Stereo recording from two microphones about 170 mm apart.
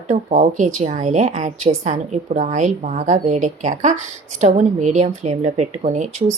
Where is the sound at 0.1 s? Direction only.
45° right (ahead or behind).